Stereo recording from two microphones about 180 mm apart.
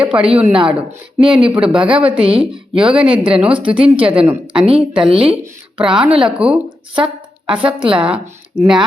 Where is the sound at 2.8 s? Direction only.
5° right (ahead or behind).